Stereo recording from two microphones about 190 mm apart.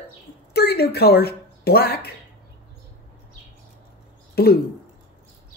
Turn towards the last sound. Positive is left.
turn(degrees=55)  # may be behind; listen again after turning